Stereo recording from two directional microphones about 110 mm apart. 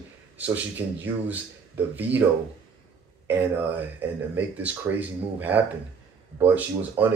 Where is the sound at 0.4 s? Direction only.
15° right (ahead or behind).